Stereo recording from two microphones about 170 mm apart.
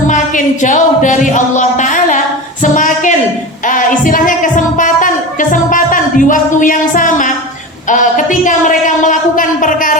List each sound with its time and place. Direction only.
0.1 s a sound: 50° left (ahead or behind)
3.7 s music: 50° left (ahead or behind)
7.9 s a man's voice: 50° left (ahead or behind)